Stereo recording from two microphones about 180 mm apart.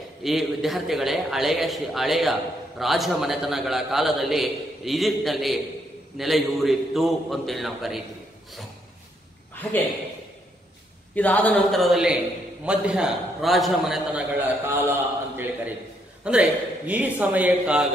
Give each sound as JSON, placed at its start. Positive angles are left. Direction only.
{"t": 0.2, "sound": "a man's voice", "side_deg": 0}
{"t": 9.6, "sound": "a man's voice", "side_deg": 10}
{"t": 11.1, "sound": "a man's voice", "side_deg": 10}